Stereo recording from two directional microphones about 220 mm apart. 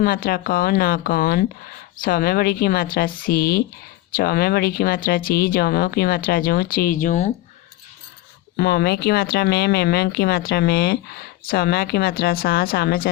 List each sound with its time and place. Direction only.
0.0 s speech: 40° left (ahead or behind)
8.5 s speech: 45° left (ahead or behind)